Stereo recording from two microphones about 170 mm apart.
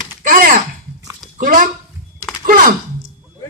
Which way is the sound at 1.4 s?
50° right (ahead or behind).